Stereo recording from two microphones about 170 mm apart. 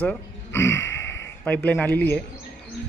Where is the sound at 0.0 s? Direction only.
10° left (ahead or behind).